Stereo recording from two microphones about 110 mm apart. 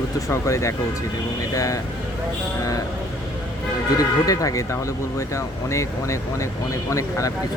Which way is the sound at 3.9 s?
35° left (ahead or behind).